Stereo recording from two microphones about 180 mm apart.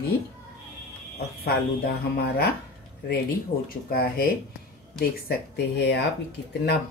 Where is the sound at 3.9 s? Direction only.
55° left (ahead or behind).